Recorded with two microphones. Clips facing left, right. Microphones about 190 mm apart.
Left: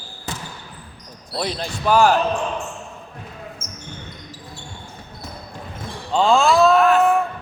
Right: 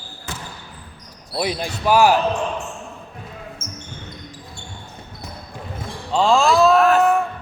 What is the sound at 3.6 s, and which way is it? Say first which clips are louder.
Basketball bounce: right 2 dB; 25° right (ahead or behind).